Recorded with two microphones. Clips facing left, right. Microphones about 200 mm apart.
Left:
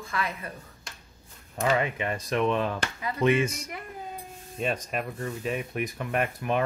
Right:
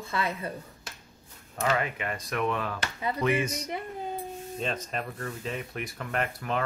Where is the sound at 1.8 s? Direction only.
25° left (ahead or behind).